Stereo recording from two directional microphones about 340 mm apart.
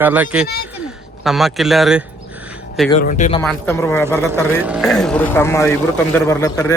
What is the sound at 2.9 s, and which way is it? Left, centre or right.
Speech, left.